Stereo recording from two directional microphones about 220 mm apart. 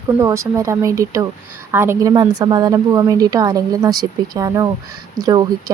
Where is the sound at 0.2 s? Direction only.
15° right (ahead or behind).